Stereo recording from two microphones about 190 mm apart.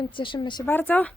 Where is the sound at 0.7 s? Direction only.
10° left (ahead or behind).